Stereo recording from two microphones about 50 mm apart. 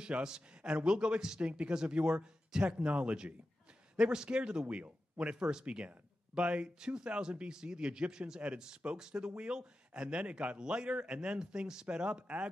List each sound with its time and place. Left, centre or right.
0.0 s speech: centre